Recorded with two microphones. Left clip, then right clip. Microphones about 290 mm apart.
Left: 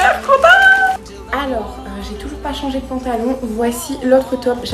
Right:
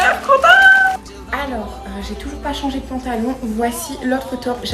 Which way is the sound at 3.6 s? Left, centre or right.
Centre.